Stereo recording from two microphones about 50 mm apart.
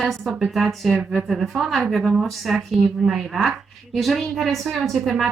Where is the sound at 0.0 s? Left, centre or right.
Centre.